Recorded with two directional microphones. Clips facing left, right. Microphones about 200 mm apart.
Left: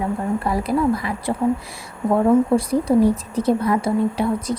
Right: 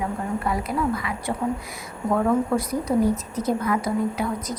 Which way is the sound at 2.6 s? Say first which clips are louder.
Left 5 dB; 30° left (ahead or behind).